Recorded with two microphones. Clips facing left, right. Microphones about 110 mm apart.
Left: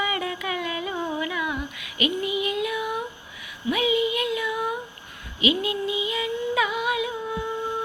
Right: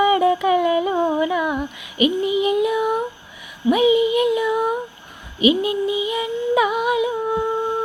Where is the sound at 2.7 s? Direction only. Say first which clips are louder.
Right 8 dB; 45° right (ahead or behind).